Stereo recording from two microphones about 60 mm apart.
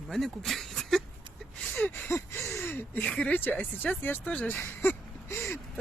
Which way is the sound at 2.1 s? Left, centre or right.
Left.